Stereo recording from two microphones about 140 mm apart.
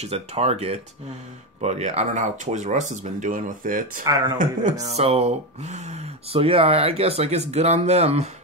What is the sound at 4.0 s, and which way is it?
Speech, 25° right (ahead or behind).